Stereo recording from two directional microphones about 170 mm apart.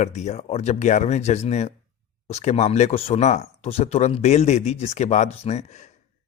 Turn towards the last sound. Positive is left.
turn(degrees=40)  # may be behind; listen again after turning